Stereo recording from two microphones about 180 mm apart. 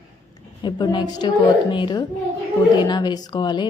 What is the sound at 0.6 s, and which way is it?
Speech, 25° left (ahead or behind).